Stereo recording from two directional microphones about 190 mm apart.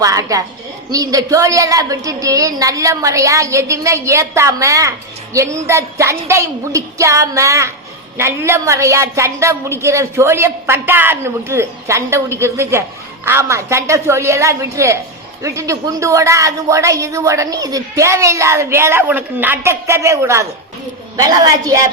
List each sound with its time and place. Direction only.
0.0 s a woman's voice: 15° right (ahead or behind)